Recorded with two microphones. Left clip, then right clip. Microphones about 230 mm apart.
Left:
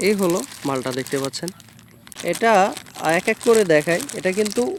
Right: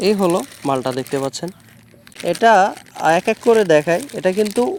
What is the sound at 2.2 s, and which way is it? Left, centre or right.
Speech, centre.